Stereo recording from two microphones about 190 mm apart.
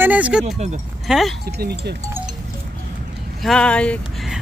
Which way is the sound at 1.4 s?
55° right (ahead or behind).